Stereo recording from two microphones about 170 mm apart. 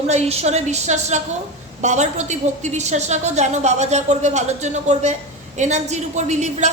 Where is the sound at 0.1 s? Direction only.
40° right (ahead or behind).